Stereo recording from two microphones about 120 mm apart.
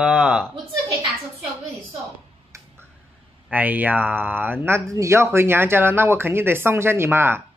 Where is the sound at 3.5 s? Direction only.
15° right (ahead or behind).